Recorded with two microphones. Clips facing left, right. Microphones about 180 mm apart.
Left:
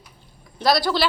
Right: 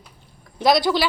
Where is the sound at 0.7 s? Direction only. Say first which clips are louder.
Right 2 dB; 15° right (ahead or behind).